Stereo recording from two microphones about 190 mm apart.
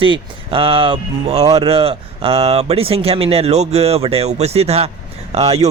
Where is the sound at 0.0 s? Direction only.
30° right (ahead or behind).